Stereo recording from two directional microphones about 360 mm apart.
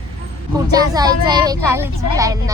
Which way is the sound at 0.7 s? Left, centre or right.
Centre.